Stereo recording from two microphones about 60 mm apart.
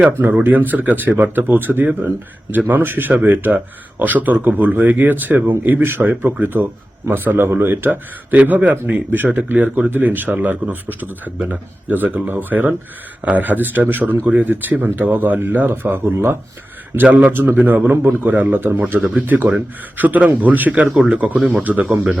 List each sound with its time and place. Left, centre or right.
0.4 s speech: right
7.1 s speech: right
16.9 s a man's voice: right
20.8 s speech: centre
21.1 s a man's voice: right